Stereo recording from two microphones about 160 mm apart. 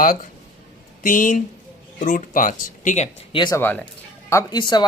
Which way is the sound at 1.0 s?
55° left (ahead or behind).